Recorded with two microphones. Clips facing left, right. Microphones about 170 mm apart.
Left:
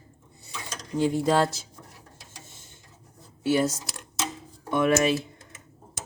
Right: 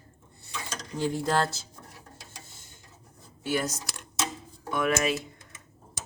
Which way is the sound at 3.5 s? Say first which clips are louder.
Left 6 dB; 25° left (ahead or behind).